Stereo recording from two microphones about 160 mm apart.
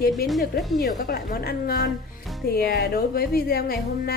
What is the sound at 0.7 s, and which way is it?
A woman's voice, 65° left (ahead or behind).